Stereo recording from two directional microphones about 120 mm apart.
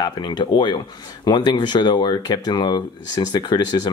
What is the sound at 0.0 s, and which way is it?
Speech, 35° left (ahead or behind).